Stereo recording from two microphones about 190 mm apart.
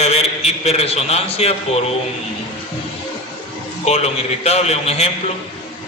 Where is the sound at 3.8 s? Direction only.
35° left (ahead or behind).